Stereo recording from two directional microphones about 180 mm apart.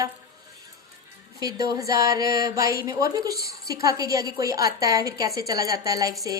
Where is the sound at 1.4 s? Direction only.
20° right (ahead or behind).